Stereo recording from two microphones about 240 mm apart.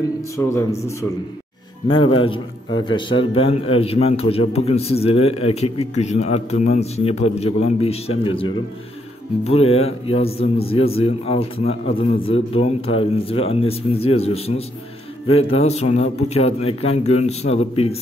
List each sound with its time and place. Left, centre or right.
0.5 s speech: centre
1.9 s a man's voice: left